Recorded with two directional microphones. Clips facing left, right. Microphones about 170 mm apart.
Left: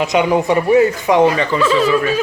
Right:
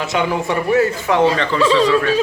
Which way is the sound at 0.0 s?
15° left (ahead or behind).